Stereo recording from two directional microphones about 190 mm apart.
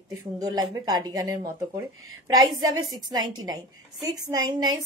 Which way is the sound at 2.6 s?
20° right (ahead or behind).